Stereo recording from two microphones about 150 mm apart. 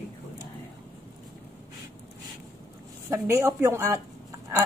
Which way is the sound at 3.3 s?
20° right (ahead or behind).